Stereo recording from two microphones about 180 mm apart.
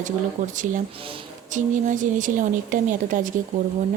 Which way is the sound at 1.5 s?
45° right (ahead or behind).